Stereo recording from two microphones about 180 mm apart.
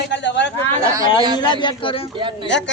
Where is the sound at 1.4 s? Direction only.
25° left (ahead or behind).